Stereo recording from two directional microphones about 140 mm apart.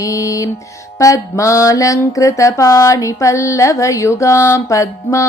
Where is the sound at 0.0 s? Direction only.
20° left (ahead or behind).